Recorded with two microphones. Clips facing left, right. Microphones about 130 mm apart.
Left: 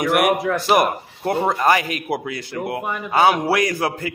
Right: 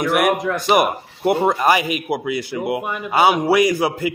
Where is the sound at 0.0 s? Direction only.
5° left (ahead or behind).